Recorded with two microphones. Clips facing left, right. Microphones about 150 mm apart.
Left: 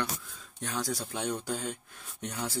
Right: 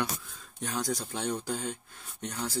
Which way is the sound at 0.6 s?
5° right (ahead or behind).